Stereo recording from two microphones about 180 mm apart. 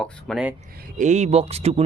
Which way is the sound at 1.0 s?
40° right (ahead or behind).